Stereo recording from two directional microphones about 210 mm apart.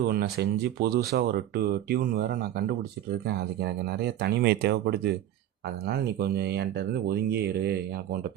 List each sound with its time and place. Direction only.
0.1 s speech: 50° right (ahead or behind)